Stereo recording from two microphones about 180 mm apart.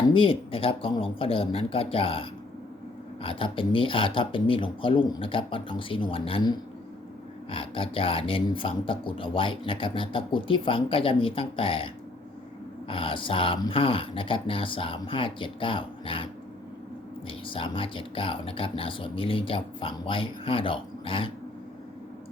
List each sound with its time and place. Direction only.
0.1 s speech: 30° left (ahead or behind)
7.5 s speech: 30° left (ahead or behind)
12.9 s speech: 30° left (ahead or behind)